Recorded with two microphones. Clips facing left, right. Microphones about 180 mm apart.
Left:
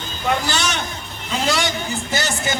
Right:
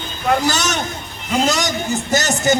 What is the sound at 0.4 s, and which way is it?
A man's voice, 40° right (ahead or behind).